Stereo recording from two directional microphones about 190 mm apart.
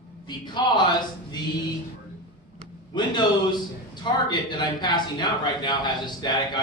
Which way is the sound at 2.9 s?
20° left (ahead or behind).